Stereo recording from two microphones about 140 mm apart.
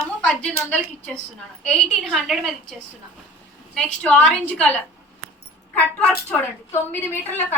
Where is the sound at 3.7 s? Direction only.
10° left (ahead or behind).